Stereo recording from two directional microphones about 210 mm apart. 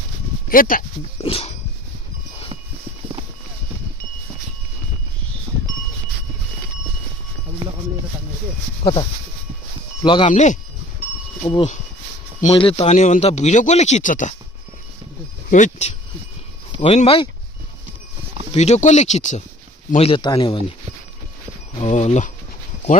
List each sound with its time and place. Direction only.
0.5 s speech: 40° left (ahead or behind)
1.2 s speech: 25° left (ahead or behind)
10.0 s speech: 20° left (ahead or behind)
10.3 s speech: 35° left (ahead or behind)
11.4 s speech: 25° left (ahead or behind)
15.5 s speech: 35° left (ahead or behind)
18.5 s speech: 30° left (ahead or behind)
21.8 s speech: 30° left (ahead or behind)